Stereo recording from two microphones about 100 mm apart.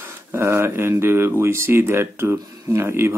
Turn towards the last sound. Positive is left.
turn(degrees=-25)  # may be behind; listen again after turning